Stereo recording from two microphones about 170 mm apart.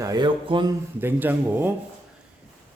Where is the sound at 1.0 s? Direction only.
10° right (ahead or behind).